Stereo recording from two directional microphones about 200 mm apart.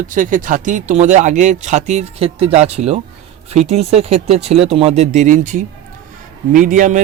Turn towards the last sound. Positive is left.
turn(degrees=-40)  # may be behind; listen again after turning